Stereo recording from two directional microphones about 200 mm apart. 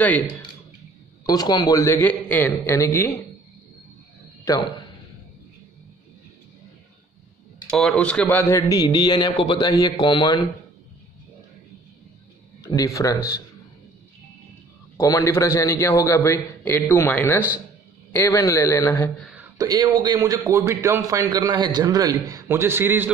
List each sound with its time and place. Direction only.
1.2 s a man's voice: 20° left (ahead or behind)
7.7 s a man's voice: centre (ahead or behind)
8.5 s a man's voice: 20° left (ahead or behind)
12.6 s a man's voice: 15° left (ahead or behind)
15.0 s a man's voice: 15° left (ahead or behind)
19.6 s a man's voice: 20° right (ahead or behind)